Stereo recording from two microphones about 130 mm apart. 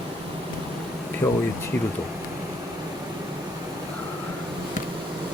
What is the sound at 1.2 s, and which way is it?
Speech, 25° left (ahead or behind).